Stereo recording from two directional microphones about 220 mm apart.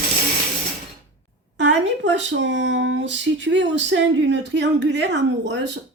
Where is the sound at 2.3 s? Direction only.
55° right (ahead or behind).